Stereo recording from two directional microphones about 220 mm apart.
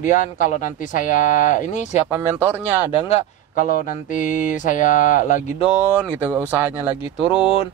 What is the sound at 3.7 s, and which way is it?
Speech, 40° left (ahead or behind).